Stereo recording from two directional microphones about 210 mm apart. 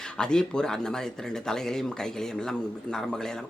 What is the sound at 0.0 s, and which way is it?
Speech, 5° left (ahead or behind).